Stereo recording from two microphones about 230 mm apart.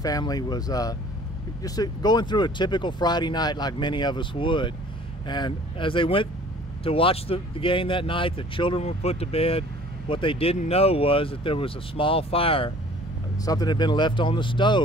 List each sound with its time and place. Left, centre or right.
0.0 s speech: centre